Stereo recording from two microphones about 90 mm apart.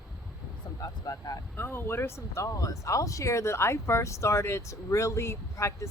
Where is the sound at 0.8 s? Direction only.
45° left (ahead or behind).